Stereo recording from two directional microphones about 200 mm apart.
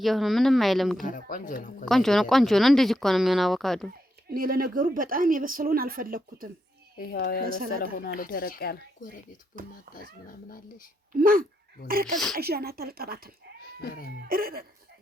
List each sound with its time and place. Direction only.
0.0 s speech: centre (ahead or behind)
1.0 s speech: 40° left (ahead or behind)
1.8 s speech: centre (ahead or behind)
4.3 s speech: 45° right (ahead or behind)
7.0 s speech: 50° left (ahead or behind)
11.1 s speech: 45° right (ahead or behind)
13.6 s cat: 50° left (ahead or behind)
14.3 s speech: 45° right (ahead or behind)